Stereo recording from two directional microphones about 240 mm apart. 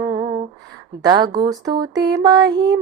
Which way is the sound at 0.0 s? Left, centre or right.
Centre.